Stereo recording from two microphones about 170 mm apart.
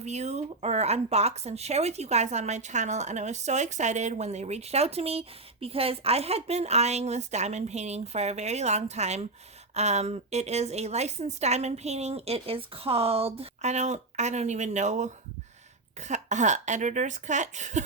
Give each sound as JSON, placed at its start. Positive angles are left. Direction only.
{"t": 0.0, "sound": "speech", "side_deg": -40}